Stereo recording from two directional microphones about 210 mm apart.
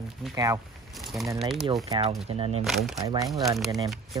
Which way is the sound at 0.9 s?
Centre (ahead or behind).